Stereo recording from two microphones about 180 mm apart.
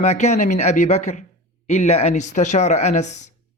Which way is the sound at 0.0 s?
40° left (ahead or behind).